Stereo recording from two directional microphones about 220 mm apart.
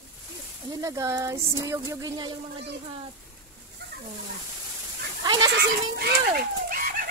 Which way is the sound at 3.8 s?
45° right (ahead or behind).